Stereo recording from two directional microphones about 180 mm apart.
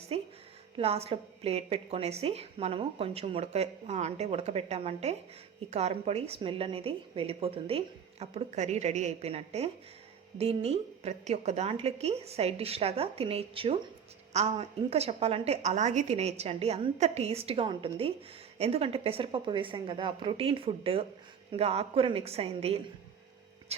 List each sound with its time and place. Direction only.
0.1 s a woman's voice: 35° right (ahead or behind)